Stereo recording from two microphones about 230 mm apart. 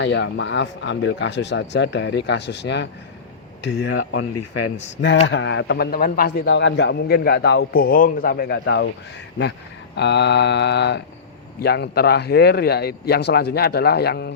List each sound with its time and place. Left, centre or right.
0.0 s speech: left
6.4 s speech: left